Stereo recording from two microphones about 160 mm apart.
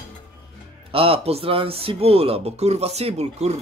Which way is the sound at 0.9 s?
35° right (ahead or behind).